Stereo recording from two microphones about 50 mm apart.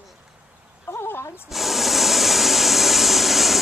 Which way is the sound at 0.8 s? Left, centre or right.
Left.